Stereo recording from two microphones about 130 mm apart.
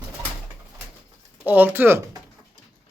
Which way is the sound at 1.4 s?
15° right (ahead or behind).